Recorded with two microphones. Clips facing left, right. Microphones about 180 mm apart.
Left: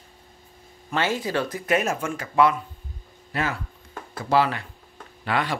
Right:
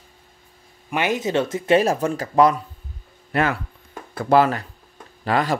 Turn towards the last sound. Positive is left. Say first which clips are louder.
# right 5 dB
turn(degrees=-40)  # may be behind; listen again after turning